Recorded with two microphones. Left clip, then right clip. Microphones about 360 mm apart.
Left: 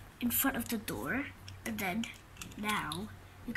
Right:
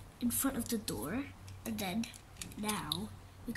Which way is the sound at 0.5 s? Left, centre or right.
Centre.